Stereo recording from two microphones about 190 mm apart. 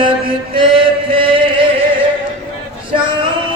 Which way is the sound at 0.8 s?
25° right (ahead or behind).